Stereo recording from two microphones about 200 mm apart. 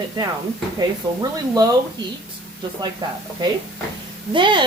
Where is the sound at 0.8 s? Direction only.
20° right (ahead or behind).